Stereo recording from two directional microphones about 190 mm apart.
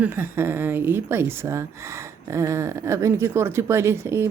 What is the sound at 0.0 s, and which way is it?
Speech, 10° right (ahead or behind).